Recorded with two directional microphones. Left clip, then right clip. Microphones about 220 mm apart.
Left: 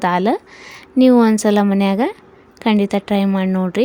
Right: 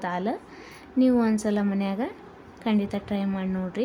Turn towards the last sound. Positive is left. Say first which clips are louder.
# left 12 dB
turn(degrees=35)  # may be behind; listen again after turning